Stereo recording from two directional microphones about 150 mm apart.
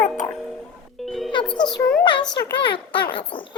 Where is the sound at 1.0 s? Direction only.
Centre (ahead or behind).